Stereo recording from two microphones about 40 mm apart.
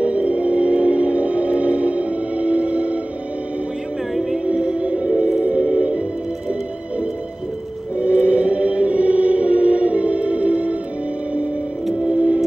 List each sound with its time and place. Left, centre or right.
0.0 s music: right
4.6 s music: right
8.0 s music: right
12.1 s music: right